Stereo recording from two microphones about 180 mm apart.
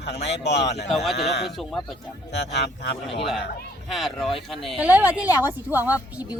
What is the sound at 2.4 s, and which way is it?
Speech, 70° left (ahead or behind).